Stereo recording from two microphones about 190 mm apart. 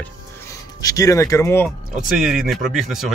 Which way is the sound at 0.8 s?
15° left (ahead or behind).